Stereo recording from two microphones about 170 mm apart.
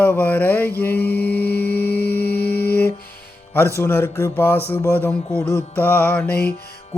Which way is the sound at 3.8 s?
15° left (ahead or behind).